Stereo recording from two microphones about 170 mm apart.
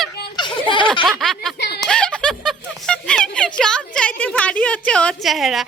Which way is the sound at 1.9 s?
5° left (ahead or behind).